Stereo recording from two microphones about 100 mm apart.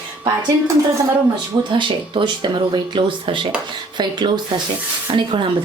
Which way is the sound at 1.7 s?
55° right (ahead or behind).